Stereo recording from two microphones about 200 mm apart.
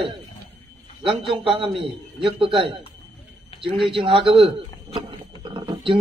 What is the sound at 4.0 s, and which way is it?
Speech, 25° right (ahead or behind).